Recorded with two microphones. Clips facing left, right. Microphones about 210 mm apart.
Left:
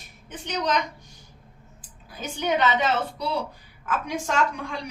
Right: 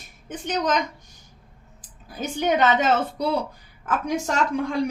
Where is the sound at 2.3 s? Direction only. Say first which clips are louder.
Right 3 dB; 45° right (ahead or behind).